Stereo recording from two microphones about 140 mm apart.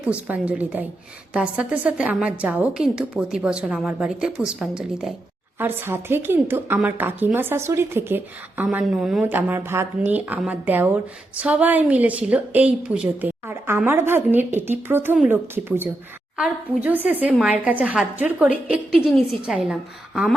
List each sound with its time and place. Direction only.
0.0 s a woman's voice: 10° right (ahead or behind)
5.5 s a woman's voice: 15° right (ahead or behind)